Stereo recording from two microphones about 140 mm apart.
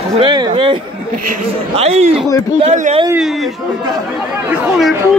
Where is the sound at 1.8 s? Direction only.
50° right (ahead or behind).